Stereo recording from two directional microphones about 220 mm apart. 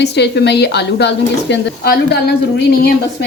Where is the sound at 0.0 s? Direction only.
50° left (ahead or behind).